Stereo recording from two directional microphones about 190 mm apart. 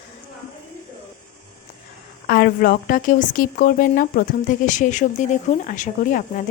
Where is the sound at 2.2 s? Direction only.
50° left (ahead or behind).